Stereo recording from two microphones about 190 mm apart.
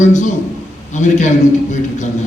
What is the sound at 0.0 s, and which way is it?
A man's voice, 40° left (ahead or behind).